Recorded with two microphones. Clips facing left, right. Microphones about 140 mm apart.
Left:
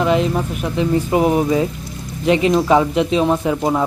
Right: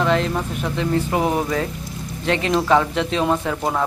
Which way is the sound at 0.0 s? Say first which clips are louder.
Left 3 dB; 10° left (ahead or behind).